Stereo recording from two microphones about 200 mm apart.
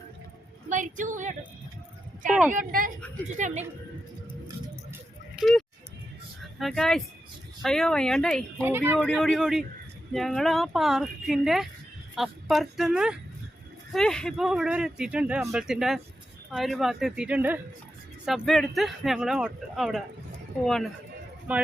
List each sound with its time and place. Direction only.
0.7 s a sound: 40° right (ahead or behind)
2.5 s a woman's voice: 40° right (ahead or behind)
5.4 s a sound: centre (ahead or behind)
6.6 s speech: centre (ahead or behind)
8.6 s speech: 10° right (ahead or behind)
9.0 s speech: 5° left (ahead or behind)
21.5 s speech: 5° right (ahead or behind)